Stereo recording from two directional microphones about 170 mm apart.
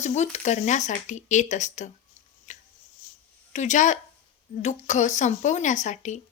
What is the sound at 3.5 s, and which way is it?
A woman's voice, 45° left (ahead or behind).